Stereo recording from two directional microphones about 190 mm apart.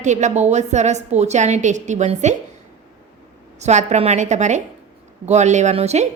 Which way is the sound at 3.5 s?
35° right (ahead or behind).